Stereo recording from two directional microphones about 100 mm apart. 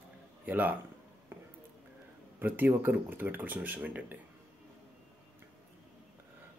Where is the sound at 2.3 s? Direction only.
20° right (ahead or behind).